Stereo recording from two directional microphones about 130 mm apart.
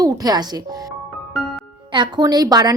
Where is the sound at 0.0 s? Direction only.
30° right (ahead or behind).